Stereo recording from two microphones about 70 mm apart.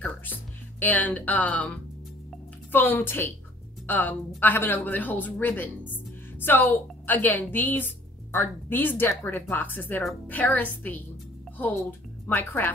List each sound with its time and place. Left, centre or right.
0.7 s a woman's voice: left
12.3 s speech: left